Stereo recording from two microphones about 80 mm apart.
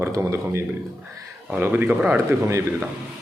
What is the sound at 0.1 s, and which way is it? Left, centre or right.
Speech, right.